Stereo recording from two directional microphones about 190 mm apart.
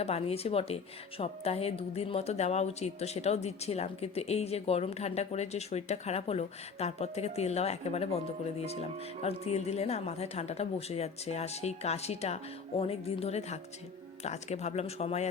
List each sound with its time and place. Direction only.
0.0 s a woman's voice: 30° left (ahead or behind)